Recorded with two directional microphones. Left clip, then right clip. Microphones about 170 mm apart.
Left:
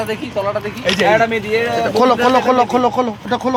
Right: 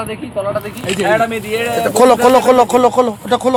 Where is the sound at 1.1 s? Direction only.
35° right (ahead or behind).